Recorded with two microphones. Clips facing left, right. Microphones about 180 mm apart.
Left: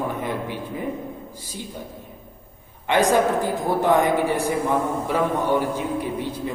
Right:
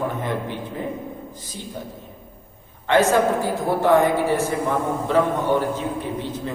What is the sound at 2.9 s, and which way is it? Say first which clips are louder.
A man's voice: right 1 dB; 15° left (ahead or behind).